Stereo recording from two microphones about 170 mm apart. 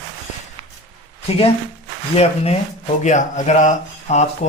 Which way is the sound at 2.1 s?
35° left (ahead or behind).